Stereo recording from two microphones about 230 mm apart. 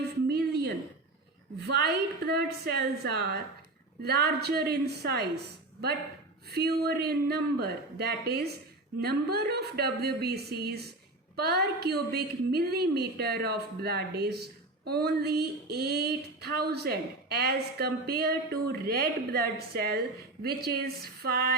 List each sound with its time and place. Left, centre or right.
0.3 s a sound: right
1.6 s a woman's voice: right
6.5 s a woman's voice: right